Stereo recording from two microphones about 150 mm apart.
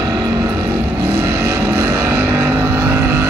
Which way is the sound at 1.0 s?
15° right (ahead or behind).